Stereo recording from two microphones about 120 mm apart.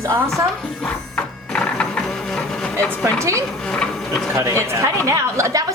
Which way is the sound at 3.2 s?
25° right (ahead or behind).